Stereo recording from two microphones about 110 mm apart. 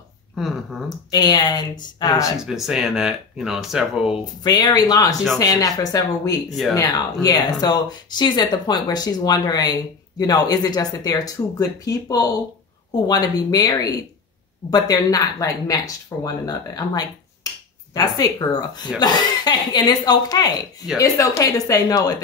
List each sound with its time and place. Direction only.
0.4 s speech: centre (ahead or behind)
0.8 s speech: 40° left (ahead or behind)
2.4 s speech: 5° right (ahead or behind)
4.4 s speech: 40° left (ahead or behind)